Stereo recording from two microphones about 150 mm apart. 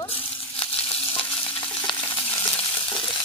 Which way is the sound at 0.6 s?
35° left (ahead or behind).